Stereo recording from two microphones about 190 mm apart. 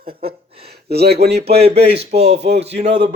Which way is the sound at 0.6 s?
55° right (ahead or behind).